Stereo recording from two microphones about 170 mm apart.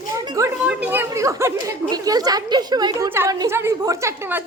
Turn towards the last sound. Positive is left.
turn(degrees=-15)  # may be behind; listen again after turning